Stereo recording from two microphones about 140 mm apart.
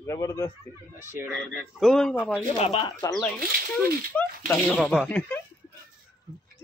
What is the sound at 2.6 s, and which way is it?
Speech, 40° left (ahead or behind).